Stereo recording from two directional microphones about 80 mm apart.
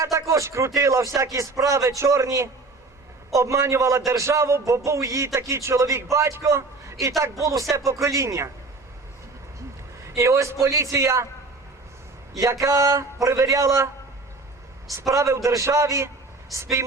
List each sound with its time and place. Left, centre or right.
0.0 s a man's voice: right
7.9 s a man's voice: right
10.2 s a man's voice: right
12.4 s a man's voice: right